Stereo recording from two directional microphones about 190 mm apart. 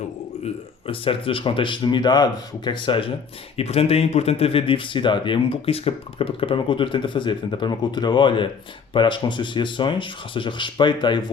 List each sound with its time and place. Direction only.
0.4 s speech: 30° left (ahead or behind)